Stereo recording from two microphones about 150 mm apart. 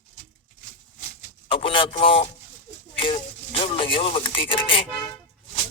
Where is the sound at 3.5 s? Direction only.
40° left (ahead or behind).